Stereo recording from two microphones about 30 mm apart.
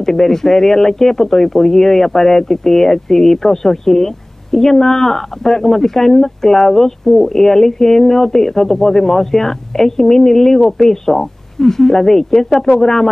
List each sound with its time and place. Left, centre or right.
0.0 s speech: centre